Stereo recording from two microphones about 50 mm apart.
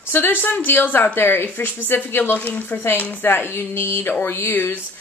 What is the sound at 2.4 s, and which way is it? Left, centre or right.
Speech, left.